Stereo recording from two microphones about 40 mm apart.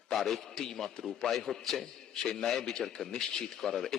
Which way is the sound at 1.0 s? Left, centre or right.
Centre.